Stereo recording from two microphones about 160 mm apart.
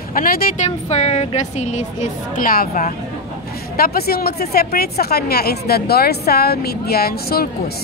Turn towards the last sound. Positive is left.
turn(degrees=70)  # may be behind; listen again after turning